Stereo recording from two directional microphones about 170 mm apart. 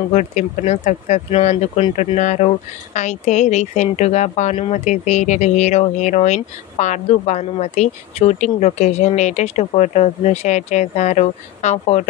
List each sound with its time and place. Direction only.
0.1 s speech: 45° left (ahead or behind)